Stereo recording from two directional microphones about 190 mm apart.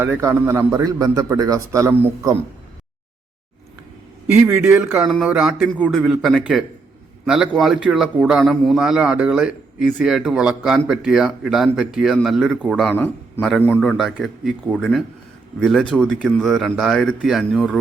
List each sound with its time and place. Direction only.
0.0 s a man's voice: 10° right (ahead or behind)
4.3 s a man's voice: 10° right (ahead or behind)